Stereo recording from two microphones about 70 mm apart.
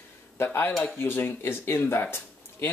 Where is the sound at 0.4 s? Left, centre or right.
Left.